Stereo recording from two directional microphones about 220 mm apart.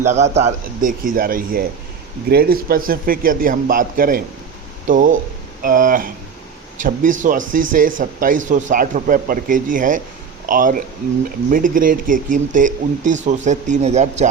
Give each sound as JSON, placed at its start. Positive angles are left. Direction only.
{"t": 0.1, "sound": "speech", "side_deg": -30}